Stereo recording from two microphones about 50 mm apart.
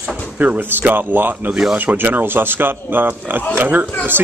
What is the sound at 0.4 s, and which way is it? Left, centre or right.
A man's voice, right.